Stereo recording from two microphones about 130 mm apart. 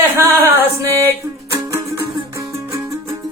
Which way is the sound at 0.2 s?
20° right (ahead or behind).